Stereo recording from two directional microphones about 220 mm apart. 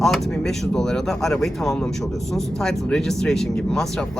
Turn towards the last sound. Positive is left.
turn(degrees=5)  # may be behind; listen again after turning